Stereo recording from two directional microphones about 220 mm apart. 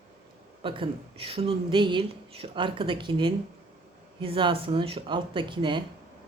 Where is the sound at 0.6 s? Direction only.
25° right (ahead or behind).